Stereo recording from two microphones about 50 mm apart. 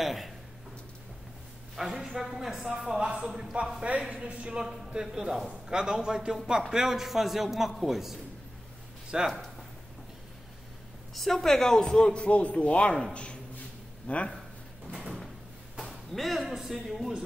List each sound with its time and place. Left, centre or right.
0.0 s a sound: centre
1.8 s speech: centre
3.5 s a woman's voice: right
4.6 s speech: centre
11.1 s a man's voice: centre; by 14.3 s left
15.8 s speech: centre